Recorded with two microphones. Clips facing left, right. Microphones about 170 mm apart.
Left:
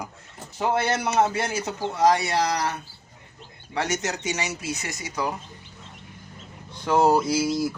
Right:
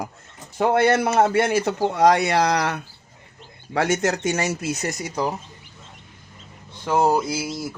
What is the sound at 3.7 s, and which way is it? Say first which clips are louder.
A man's voice: right 6 dB; 55° right (ahead or behind).